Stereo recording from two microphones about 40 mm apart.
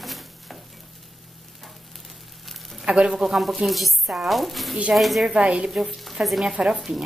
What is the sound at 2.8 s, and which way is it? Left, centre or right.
Speech, centre.